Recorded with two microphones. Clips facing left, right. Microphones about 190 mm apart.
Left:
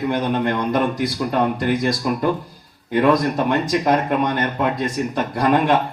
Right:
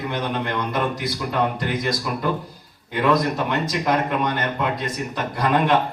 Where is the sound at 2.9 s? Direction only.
45° left (ahead or behind).